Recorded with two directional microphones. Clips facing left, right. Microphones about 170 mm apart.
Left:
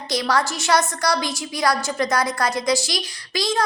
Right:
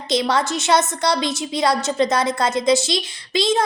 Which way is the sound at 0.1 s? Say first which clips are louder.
Right 3 dB; 25° right (ahead or behind).